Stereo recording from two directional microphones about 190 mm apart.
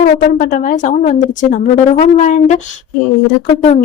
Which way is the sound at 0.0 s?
40° left (ahead or behind).